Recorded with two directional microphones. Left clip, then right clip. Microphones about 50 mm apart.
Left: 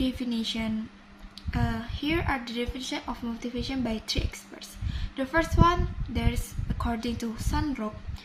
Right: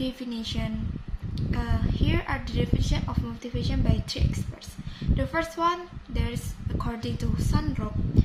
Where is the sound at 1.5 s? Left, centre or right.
Left.